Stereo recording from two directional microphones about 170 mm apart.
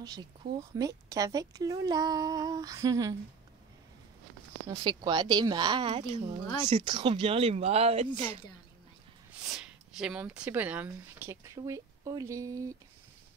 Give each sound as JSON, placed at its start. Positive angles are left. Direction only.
{"t": 0.0, "sound": "speech", "side_deg": -25}
{"t": 4.6, "sound": "speech", "side_deg": -25}
{"t": 6.4, "sound": "speech", "side_deg": 15}
{"t": 6.7, "sound": "speech", "side_deg": -30}
{"t": 9.5, "sound": "speech", "side_deg": -5}